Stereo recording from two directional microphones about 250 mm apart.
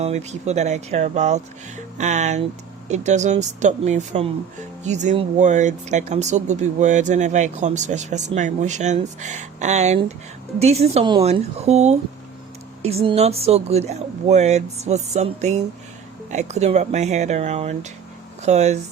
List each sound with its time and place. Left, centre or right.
0.0 s speech: right